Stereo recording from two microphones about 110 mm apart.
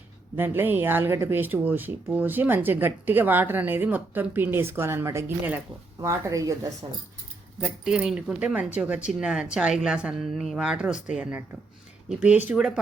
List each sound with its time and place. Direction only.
0.3 s speech: 20° right (ahead or behind)
7.6 s speech: 5° right (ahead or behind)